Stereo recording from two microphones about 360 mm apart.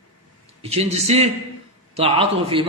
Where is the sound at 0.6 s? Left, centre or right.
Centre.